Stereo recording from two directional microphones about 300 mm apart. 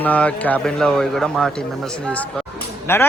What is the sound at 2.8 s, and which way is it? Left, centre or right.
Speech, centre.